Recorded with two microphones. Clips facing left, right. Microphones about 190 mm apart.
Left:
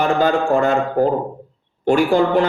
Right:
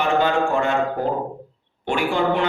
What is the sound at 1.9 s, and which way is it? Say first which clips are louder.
Speech: left 6 dB; 40° left (ahead or behind).